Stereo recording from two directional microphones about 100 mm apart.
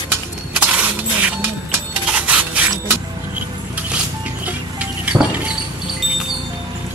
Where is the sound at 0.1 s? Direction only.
15° right (ahead or behind).